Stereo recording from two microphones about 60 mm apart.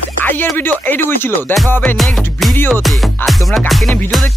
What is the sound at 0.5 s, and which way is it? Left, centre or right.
Speech, left.